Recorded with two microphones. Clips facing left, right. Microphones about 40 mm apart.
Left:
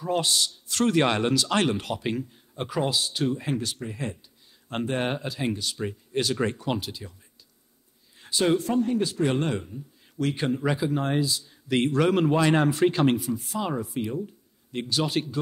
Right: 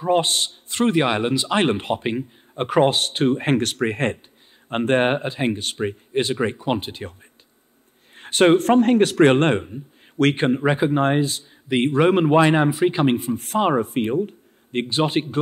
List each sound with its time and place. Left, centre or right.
0.0 s a man's voice: right
3.5 s speech: right
4.8 s speech: right
6.3 s a man's voice: right
8.2 s speech: right
10.3 s speech: right
11.7 s a man's voice: right
13.4 s speech: right
14.9 s speech: right